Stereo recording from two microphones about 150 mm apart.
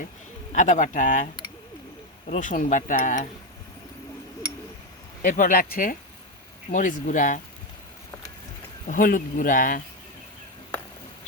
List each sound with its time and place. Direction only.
0.5 s speech: 55° left (ahead or behind)
5.2 s speech: 60° left (ahead or behind)
8.9 s speech: 65° left (ahead or behind)